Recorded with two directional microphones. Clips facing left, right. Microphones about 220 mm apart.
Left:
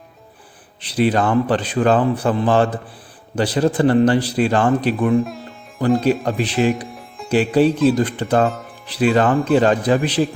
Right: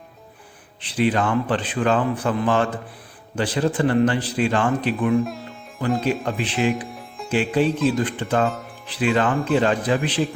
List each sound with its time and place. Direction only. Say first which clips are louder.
0.8 s speech: left 3 dB; 40° left (ahead or behind)
5.2 s sitar: left 1 dB; centre (ahead or behind)
6.2 s speech: left 5 dB; 40° left (ahead or behind)
6.8 s music: left 1 dB; centre (ahead or behind)
7.3 s music: left 5 dB; 35° left (ahead or behind)
7.7 s speech: left 5 dB; centre (ahead or behind)
7.9 s speech: left 4 dB; 40° left (ahead or behind)
8.4 s speech: left 3 dB; centre (ahead or behind)
8.9 s speech: left 5 dB; 40° left (ahead or behind)